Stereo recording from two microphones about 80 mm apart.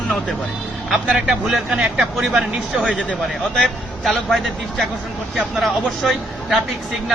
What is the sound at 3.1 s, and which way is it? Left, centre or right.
A man's voice, centre.